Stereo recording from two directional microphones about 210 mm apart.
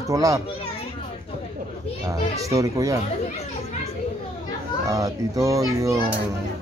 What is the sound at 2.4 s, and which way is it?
Speech, 15° right (ahead or behind).